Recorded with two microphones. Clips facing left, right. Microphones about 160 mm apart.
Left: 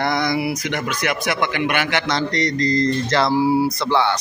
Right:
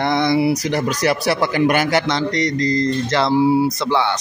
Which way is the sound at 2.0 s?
20° right (ahead or behind).